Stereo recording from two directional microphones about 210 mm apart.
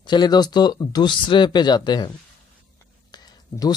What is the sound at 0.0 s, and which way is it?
Speech, 20° left (ahead or behind).